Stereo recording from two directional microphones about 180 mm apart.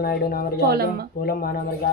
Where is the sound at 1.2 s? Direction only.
55° left (ahead or behind).